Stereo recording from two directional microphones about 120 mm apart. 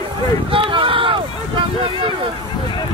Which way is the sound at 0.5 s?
45° right (ahead or behind).